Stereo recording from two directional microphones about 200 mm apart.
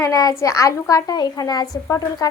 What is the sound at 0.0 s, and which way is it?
A woman's voice, 20° left (ahead or behind).